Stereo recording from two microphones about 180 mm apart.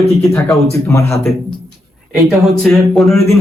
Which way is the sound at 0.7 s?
15° left (ahead or behind).